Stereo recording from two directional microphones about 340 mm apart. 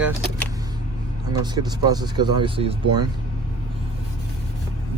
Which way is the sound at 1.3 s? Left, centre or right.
Centre.